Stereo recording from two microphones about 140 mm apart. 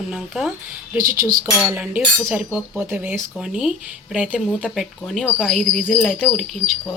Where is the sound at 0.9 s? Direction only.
85° right.